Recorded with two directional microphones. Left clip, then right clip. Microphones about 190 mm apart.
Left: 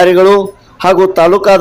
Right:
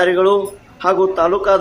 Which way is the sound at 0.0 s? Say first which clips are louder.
Left 7 dB; 40° left (ahead or behind).